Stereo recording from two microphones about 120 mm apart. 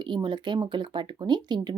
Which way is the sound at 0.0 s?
40° right (ahead or behind).